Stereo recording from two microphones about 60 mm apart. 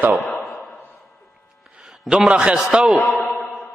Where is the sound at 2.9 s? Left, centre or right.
Left.